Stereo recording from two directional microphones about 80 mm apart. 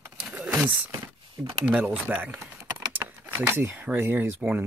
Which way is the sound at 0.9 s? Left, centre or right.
Right.